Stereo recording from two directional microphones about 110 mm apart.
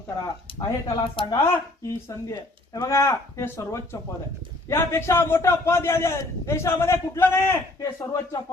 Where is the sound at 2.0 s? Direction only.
30° left (ahead or behind).